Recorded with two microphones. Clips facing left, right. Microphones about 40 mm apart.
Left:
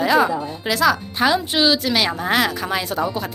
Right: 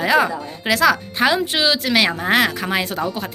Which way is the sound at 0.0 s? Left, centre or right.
Right.